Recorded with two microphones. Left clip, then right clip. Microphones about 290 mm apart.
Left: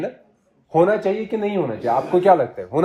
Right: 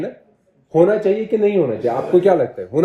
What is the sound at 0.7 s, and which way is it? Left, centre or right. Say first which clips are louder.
Speech: right 3 dB; centre.